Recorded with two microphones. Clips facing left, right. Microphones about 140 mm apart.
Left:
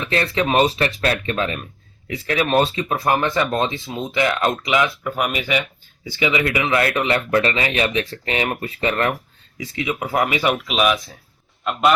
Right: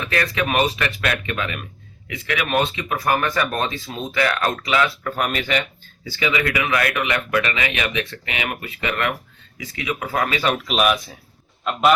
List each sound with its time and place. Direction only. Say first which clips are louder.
0.0 s speech: left 2 dB; 25° left (ahead or behind); by 5.6 s 10° left (ahead or behind)
6.1 s speech: left 2 dB; 20° left (ahead or behind)
10.7 s a man's voice: even; centre (ahead or behind)